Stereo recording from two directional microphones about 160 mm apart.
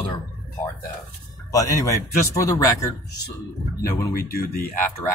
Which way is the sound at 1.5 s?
20° left (ahead or behind).